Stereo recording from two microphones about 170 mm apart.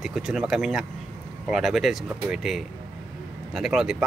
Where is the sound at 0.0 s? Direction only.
5° right (ahead or behind).